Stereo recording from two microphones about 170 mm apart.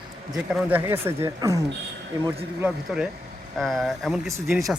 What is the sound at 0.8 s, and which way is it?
Speech, 15° right (ahead or behind).